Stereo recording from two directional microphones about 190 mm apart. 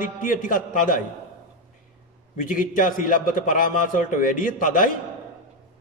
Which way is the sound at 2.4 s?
45° left (ahead or behind).